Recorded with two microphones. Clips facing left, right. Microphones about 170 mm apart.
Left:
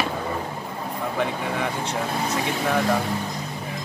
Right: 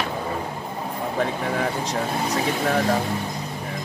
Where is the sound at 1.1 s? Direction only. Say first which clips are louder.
Right 2 dB; 35° right (ahead or behind).